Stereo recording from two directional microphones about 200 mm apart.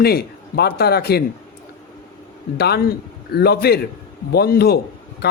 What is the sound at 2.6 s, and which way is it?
Speech, 50° left (ahead or behind).